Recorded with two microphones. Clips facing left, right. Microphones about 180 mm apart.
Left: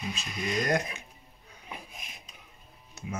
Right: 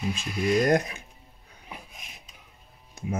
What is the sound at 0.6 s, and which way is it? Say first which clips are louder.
Speech: right 4 dB; 50° right (ahead or behind).